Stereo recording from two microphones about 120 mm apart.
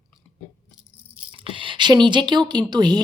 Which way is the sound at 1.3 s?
45° right (ahead or behind).